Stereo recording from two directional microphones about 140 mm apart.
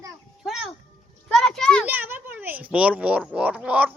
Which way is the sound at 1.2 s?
Centre (ahead or behind).